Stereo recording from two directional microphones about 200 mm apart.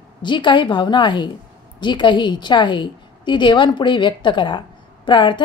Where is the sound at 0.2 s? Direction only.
25° left (ahead or behind).